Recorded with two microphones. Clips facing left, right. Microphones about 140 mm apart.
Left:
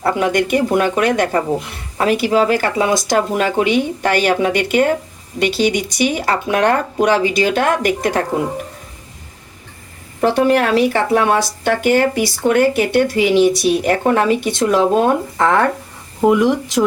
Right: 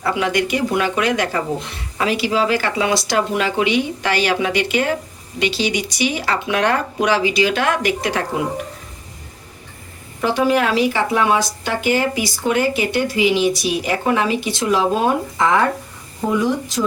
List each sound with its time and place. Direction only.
0.0 s speech: 50° left (ahead or behind)
10.5 s speech: 60° left (ahead or behind)
16.2 s speech: 75° left (ahead or behind)